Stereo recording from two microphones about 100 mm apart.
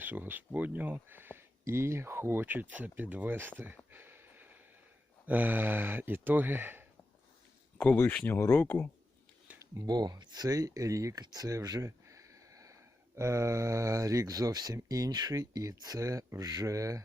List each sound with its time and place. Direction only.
0.0 s speech: 20° right (ahead or behind)
3.9 s a sound: 20° right (ahead or behind)
5.2 s speech: 15° right (ahead or behind)
7.9 s speech: 20° left (ahead or behind)
9.7 s speech: 45° right (ahead or behind)